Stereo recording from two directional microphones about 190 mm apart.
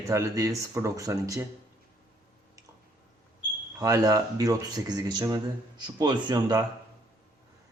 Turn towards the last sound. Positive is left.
turn(degrees=-20)  # may be behind; listen again after turning